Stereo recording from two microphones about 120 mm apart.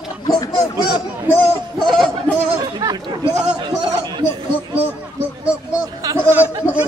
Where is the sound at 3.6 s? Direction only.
40° right (ahead or behind).